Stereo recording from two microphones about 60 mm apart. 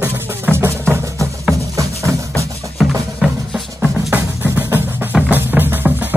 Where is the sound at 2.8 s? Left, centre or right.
Centre.